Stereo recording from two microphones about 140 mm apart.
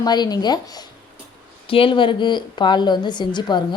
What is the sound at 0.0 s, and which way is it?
Speech, 30° left (ahead or behind).